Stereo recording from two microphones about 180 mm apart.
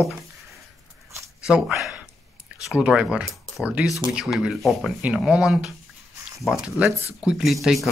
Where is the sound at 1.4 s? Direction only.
5° right (ahead or behind).